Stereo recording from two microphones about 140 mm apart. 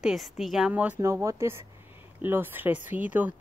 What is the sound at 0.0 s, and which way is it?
A woman's voice, centre (ahead or behind).